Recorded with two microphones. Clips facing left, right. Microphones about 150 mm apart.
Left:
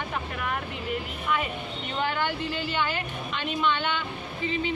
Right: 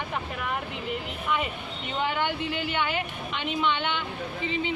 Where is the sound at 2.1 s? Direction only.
20° right (ahead or behind).